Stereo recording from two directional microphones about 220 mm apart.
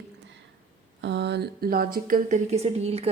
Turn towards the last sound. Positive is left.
turn(degrees=-25)  # may be behind; listen again after turning